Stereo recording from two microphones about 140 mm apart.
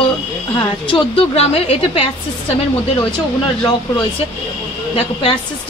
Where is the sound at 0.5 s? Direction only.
40° left (ahead or behind).